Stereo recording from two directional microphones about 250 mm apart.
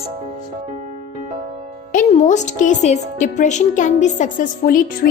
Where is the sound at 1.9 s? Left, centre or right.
Left.